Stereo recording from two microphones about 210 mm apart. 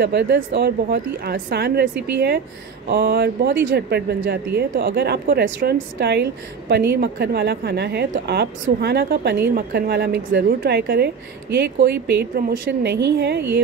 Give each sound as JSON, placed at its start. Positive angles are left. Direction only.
{"t": 0.0, "sound": "speech", "side_deg": -50}